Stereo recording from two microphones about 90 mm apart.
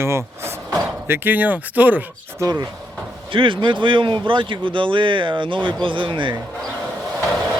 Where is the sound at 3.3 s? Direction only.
70° right (ahead or behind).